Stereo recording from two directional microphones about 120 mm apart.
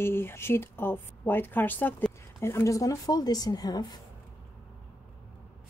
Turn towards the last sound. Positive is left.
turn(degrees=35)  # may be behind; listen again after turning